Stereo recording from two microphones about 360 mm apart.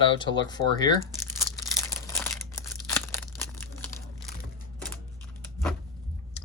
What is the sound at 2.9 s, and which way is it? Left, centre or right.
Tearing, centre.